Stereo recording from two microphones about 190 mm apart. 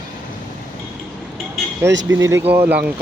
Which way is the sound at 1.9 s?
15° right (ahead or behind).